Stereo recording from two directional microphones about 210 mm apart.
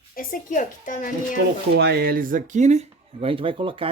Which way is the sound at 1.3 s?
55° right (ahead or behind).